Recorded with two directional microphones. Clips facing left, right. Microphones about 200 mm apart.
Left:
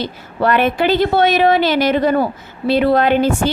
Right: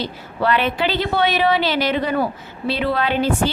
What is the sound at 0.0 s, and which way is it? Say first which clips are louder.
A woman's voice: left 3 dB; 50° left (ahead or behind).